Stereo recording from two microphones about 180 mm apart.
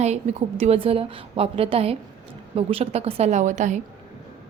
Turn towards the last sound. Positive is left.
turn(degrees=-40)  # may be behind; listen again after turning